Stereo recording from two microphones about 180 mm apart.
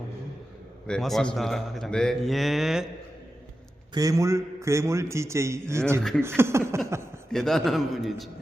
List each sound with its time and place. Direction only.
0.9 s a man's voice: centre (ahead or behind)
3.9 s a man's voice: 20° right (ahead or behind)
6.0 s a man's voice: 5° left (ahead or behind)
6.2 s a man's voice: 15° right (ahead or behind)
7.3 s a man's voice: 5° left (ahead or behind)